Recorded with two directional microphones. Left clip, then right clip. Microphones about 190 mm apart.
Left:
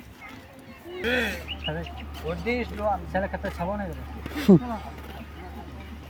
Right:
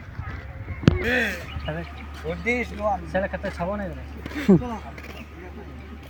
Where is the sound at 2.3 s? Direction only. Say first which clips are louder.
Right 3 dB; 50° right (ahead or behind).